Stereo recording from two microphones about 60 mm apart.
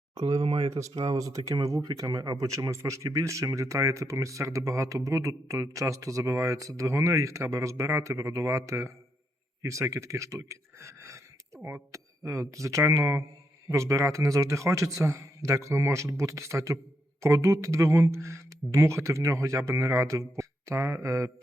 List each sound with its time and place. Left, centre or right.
0.7 s speech: right
12.3 s speech: right